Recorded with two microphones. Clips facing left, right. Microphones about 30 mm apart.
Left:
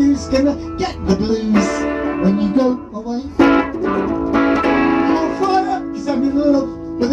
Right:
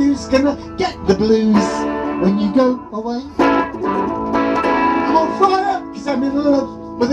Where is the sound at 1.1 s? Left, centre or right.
Right.